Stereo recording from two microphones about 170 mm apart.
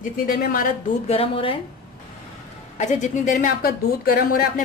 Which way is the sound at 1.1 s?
35° left (ahead or behind).